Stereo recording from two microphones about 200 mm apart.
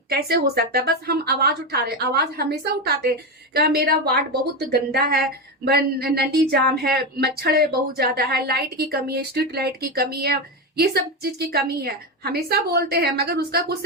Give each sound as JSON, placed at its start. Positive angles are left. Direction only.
{"t": 0.1, "sound": "a woman's voice", "side_deg": -50}